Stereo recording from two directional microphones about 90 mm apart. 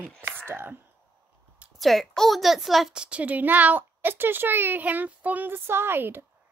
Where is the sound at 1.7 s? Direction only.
Centre (ahead or behind); by 6.3 s 25° right (ahead or behind).